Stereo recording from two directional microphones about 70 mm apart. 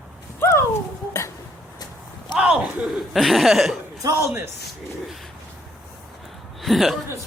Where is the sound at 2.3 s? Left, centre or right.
Centre.